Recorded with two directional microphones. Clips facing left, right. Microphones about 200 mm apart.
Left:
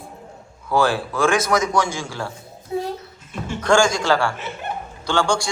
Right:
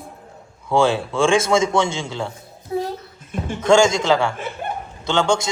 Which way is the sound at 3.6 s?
25° right (ahead or behind).